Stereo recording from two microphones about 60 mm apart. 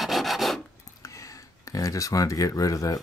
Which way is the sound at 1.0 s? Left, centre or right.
Left.